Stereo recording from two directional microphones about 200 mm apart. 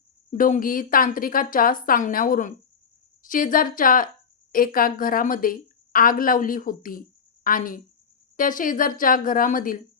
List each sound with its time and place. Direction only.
0.3 s a woman's voice: 40° left (ahead or behind)